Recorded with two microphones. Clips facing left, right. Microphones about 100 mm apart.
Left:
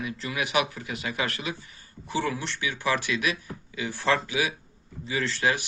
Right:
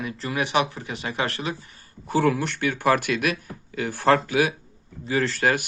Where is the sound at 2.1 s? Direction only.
50° right (ahead or behind).